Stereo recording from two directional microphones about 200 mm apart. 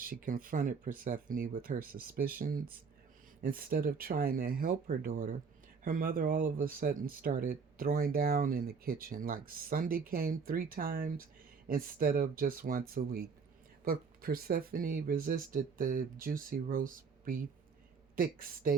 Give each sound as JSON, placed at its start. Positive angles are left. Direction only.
{"t": 0.0, "sound": "speech", "side_deg": -45}